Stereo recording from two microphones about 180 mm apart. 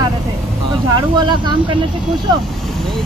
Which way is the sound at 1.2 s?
25° right (ahead or behind).